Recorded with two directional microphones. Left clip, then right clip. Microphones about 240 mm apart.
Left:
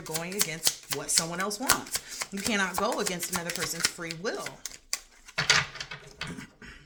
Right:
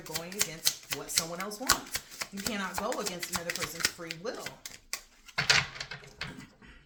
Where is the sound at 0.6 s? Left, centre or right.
Centre.